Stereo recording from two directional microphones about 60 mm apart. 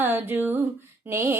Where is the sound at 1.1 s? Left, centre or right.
Right.